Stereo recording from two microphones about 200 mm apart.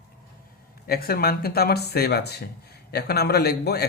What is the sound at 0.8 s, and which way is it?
Speech, 50° left (ahead or behind).